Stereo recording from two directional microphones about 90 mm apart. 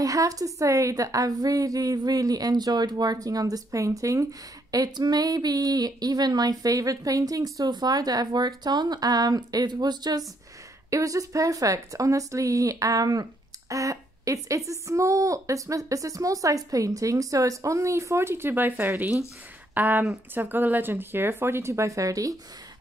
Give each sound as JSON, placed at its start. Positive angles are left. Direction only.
{"t": 0.0, "sound": "a woman's voice", "side_deg": -40}
{"t": 10.9, "sound": "speech", "side_deg": -40}